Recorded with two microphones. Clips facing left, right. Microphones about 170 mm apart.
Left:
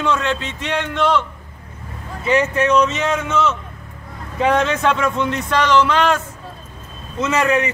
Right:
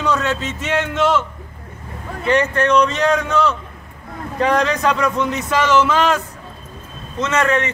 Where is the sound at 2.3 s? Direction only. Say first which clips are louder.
Even; 5° left (ahead or behind).